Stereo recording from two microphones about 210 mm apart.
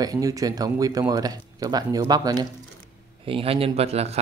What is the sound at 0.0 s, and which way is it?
Speech, 15° right (ahead or behind).